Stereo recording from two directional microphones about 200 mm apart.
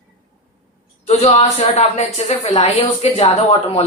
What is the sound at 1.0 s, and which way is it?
Speech, 30° left (ahead or behind).